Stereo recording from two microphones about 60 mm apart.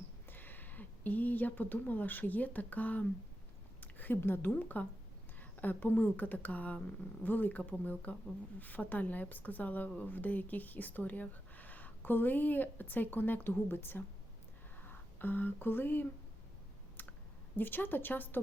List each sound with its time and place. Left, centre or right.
0.3 s speech: left
3.8 s a sound: left
4.2 s a woman's voice: left
4.6 s speech: left
17.0 s clicking: left
17.6 s a woman's voice: left